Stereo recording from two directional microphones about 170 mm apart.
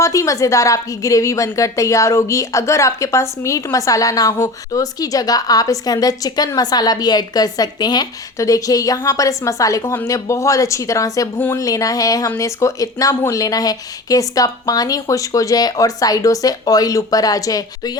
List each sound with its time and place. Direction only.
0.0 s a woman's voice: 20° left (ahead or behind)